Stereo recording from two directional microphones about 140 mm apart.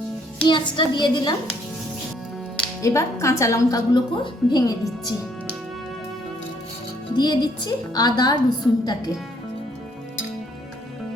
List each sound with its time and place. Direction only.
0.4 s a woman's voice: 30° left (ahead or behind)
2.8 s a woman's voice: 20° left (ahead or behind)
7.2 s a woman's voice: 30° left (ahead or behind)